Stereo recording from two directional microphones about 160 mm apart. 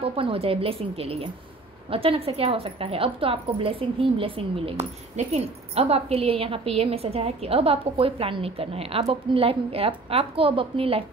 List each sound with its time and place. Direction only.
0.0 s a woman's voice: 35° right (ahead or behind)